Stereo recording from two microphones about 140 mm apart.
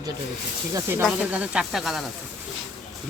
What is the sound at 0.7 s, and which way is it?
Speech, 20° right (ahead or behind).